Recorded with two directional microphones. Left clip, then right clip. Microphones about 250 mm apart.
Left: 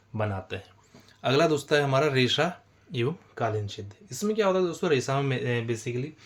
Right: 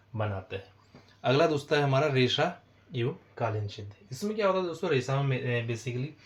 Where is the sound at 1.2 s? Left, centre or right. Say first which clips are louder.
Left 2 dB; left.